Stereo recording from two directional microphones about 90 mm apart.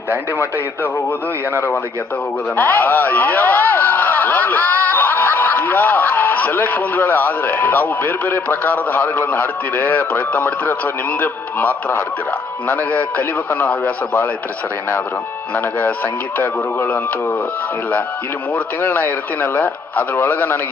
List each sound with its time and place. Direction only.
1.5 s a man's voice: 25° left (ahead or behind)
16.4 s a man's voice: 25° left (ahead or behind)
18.5 s a man's voice: 20° left (ahead or behind)